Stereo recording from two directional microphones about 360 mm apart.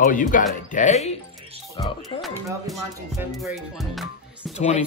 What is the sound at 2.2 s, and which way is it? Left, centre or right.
Music, centre.